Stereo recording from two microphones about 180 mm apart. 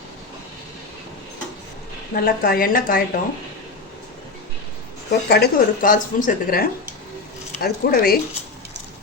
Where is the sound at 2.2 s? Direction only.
55° left (ahead or behind).